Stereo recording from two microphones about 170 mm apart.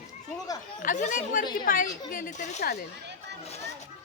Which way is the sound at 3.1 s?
90° right.